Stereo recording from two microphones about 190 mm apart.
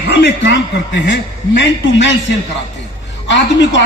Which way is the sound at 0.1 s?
65° left (ahead or behind).